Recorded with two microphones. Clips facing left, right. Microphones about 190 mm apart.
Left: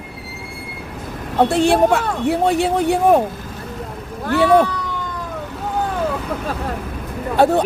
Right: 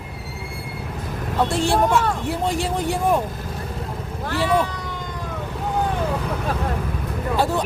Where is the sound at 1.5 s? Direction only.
65° left (ahead or behind).